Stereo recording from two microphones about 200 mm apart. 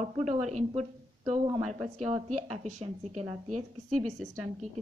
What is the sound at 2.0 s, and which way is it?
A woman's voice, 35° right (ahead or behind).